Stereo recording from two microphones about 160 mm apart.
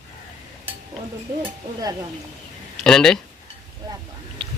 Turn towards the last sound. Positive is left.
turn(degrees=5)  # may be behind; listen again after turning